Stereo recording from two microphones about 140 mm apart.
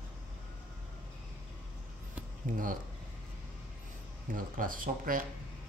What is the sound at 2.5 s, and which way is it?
Speech, 75° right (ahead or behind).